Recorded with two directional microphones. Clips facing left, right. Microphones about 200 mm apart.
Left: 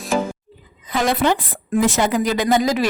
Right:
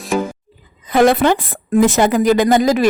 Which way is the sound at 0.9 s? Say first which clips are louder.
Right 6 dB; 55° right (ahead or behind).